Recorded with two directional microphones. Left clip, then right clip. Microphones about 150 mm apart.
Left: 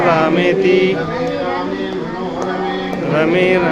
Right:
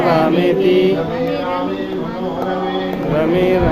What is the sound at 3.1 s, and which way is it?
Music, 5° right (ahead or behind).